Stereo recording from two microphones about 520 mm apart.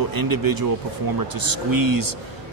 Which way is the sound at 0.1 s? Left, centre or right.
Right.